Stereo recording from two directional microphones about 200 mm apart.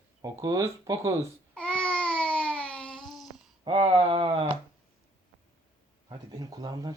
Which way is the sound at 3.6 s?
25° right (ahead or behind).